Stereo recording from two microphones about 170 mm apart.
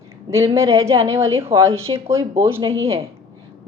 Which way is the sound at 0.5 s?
15° right (ahead or behind).